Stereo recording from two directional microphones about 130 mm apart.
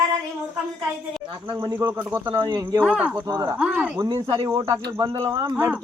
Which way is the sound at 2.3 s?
35° right (ahead or behind).